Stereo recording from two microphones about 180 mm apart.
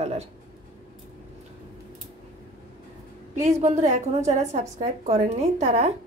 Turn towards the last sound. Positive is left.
turn(degrees=-40)  # may be behind; listen again after turning